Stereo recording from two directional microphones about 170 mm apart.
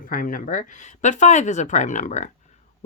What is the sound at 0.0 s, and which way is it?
Speech, 55° left (ahead or behind).